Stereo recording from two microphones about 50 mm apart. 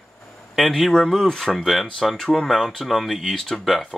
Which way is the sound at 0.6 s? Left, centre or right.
Centre.